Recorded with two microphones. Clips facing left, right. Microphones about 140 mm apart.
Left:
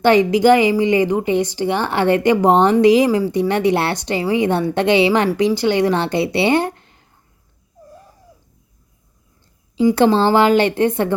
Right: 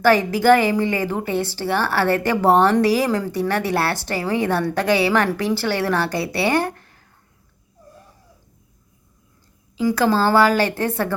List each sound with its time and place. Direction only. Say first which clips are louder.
0.0 s a woman's voice: left 4 dB; 20° left (ahead or behind)
9.7 s a woman's voice: left 5 dB; 25° left (ahead or behind)